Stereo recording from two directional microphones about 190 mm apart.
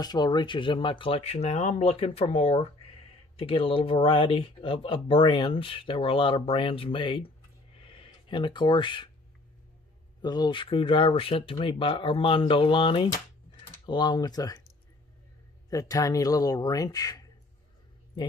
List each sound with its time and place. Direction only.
0.0 s speech: 20° left (ahead or behind)
10.2 s speech: 20° left (ahead or behind)
15.7 s speech: 20° left (ahead or behind)